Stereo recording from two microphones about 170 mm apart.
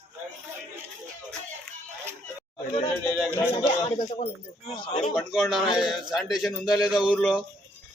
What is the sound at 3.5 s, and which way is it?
A man's voice, 35° left (ahead or behind).